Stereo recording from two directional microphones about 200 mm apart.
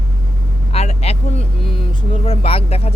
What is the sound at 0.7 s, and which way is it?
Vehicle, 30° left (ahead or behind).